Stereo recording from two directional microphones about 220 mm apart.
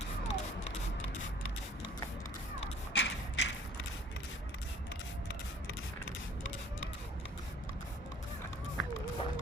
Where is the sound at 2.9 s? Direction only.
55° left (ahead or behind).